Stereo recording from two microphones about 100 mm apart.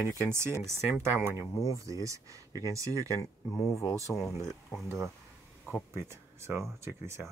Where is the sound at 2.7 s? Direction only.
30° right (ahead or behind).